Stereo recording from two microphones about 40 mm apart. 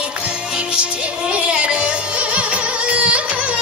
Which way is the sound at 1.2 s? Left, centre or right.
Right.